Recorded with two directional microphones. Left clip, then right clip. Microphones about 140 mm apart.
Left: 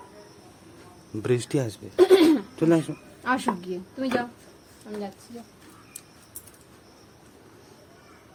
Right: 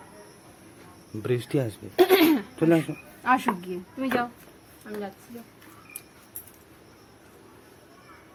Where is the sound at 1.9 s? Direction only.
45° right (ahead or behind).